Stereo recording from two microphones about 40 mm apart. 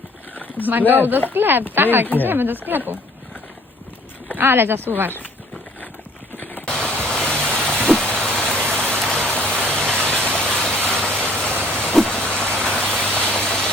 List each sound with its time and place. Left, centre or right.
0.6 s a woman's voice: right
4.4 s speech: right
6.3 s a sound: left
6.8 s a sound: left
7.3 s vehicle: left
8.2 s vehicle: left
9.6 s vehicle: centre
11.2 s a sound: left
12.1 s vehicle: left
12.9 s rain: centre